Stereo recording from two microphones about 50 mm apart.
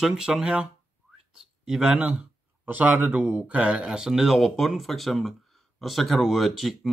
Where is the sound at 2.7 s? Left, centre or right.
Right.